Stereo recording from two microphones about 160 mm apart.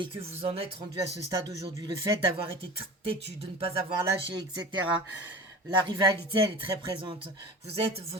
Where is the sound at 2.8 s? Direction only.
35° right (ahead or behind).